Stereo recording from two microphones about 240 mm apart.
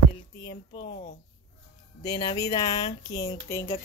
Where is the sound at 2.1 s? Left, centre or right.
Centre.